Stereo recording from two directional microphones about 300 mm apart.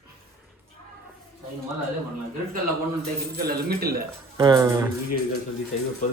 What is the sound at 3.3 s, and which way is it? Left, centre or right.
Speech, right.